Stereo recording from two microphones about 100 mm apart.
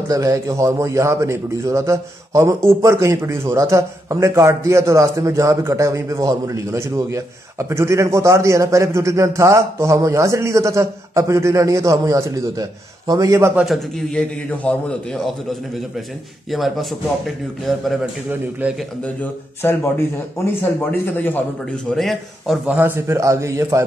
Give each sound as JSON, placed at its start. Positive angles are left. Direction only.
{"t": 0.1, "sound": "a man's voice", "side_deg": -35}
{"t": 13.7, "sound": "a man's voice", "side_deg": 5}
{"t": 16.4, "sound": "a man's voice", "side_deg": 0}
{"t": 19.6, "sound": "a man's voice", "side_deg": 25}
{"t": 21.9, "sound": "a man's voice", "side_deg": 0}
{"t": 22.8, "sound": "a man's voice", "side_deg": -25}